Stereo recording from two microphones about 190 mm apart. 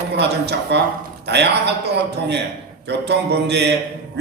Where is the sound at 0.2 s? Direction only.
60° right (ahead or behind).